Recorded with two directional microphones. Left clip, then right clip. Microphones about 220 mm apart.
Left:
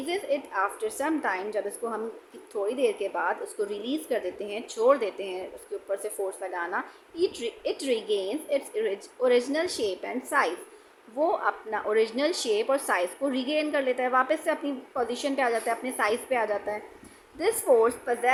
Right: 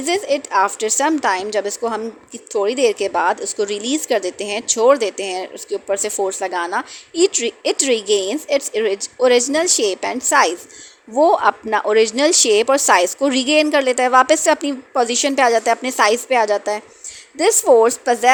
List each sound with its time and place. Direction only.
0.0 s a woman's voice: 40° right (ahead or behind)